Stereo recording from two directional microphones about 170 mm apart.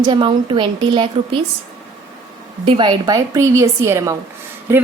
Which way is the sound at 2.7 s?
30° right (ahead or behind).